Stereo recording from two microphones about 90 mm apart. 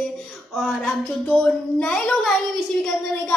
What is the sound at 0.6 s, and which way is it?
A woman's voice, 5° left (ahead or behind).